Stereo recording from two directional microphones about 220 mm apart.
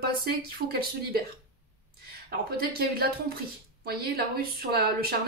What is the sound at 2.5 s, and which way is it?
Speech, 45° right (ahead or behind).